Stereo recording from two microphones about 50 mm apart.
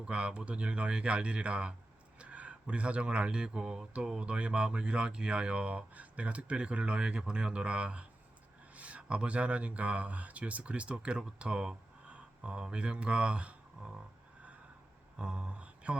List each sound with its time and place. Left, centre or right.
0.0 s speech: right
15.2 s speech: right